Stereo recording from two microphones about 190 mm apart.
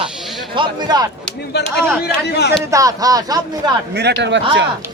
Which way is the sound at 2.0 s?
60° left (ahead or behind).